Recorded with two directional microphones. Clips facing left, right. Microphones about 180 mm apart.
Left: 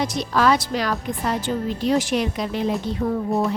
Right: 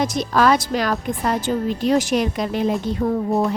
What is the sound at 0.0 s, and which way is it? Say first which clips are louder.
A woman's voice: right 2 dB; 45° right (ahead or behind).